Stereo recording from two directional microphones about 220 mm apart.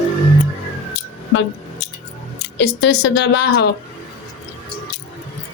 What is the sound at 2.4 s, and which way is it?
A woman's voice, 50° left (ahead or behind).